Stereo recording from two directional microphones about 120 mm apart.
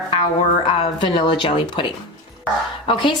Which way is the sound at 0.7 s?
45° left (ahead or behind).